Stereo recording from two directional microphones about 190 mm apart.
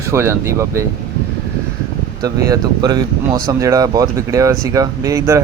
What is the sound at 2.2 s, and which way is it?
A man's voice, 20° right (ahead or behind).